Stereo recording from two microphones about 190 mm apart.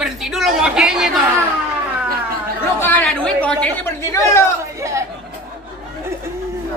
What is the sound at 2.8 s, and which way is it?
Speech, 5° left (ahead or behind).